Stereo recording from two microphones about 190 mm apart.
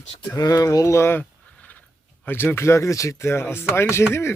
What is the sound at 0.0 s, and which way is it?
Speech, 35° left (ahead or behind).